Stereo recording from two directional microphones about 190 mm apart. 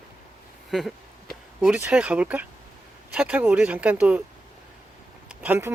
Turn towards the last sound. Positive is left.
turn(degrees=-10)  # may be behind; listen again after turning